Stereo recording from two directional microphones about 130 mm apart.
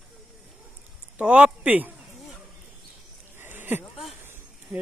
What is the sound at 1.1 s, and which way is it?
Speech, 10° right (ahead or behind).